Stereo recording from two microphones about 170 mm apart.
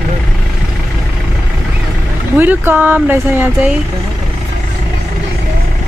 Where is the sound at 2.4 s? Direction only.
10° right (ahead or behind).